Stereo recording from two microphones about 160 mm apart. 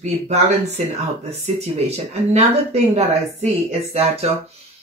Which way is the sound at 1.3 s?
45° right (ahead or behind).